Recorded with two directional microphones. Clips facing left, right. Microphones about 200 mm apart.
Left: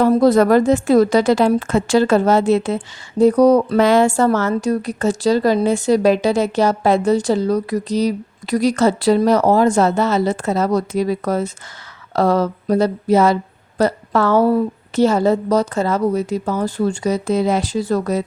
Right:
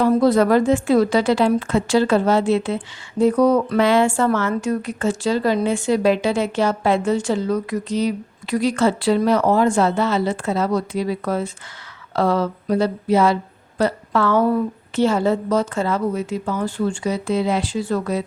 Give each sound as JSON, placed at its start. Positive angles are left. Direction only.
{"t": 0.0, "sound": "a woman's voice", "side_deg": 40}